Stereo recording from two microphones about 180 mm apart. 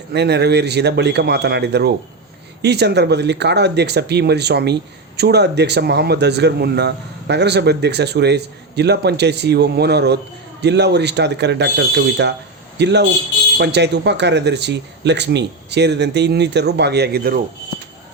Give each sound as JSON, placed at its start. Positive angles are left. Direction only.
{"t": 0.1, "sound": "speech", "side_deg": -65}